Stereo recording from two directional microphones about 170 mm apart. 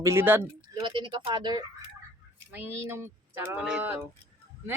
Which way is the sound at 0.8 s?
30° right (ahead or behind).